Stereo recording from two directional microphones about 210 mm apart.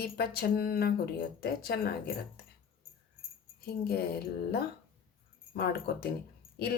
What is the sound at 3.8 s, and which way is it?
Speech, 50° left (ahead or behind).